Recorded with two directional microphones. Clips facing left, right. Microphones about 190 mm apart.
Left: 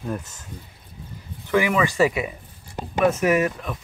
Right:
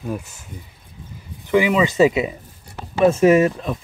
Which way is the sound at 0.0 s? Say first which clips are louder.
Right 2 dB; 5° right (ahead or behind).